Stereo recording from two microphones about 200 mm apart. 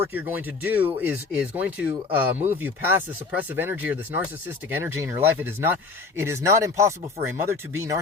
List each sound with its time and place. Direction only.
0.1 s speech: 10° right (ahead or behind)